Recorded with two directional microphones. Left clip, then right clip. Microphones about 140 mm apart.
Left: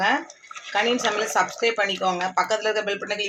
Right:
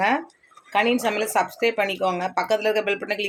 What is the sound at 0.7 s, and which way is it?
Speech, 25° right (ahead or behind).